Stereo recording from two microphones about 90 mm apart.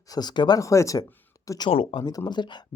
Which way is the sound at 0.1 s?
50° left (ahead or behind).